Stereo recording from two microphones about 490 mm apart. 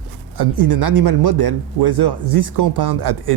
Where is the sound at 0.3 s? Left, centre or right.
Right.